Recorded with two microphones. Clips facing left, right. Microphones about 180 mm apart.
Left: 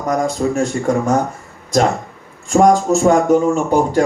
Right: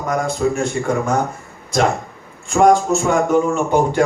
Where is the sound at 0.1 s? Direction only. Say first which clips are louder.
Left 2 dB; 40° left (ahead or behind).